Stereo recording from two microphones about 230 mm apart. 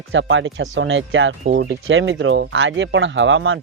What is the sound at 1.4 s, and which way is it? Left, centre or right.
Speech, right.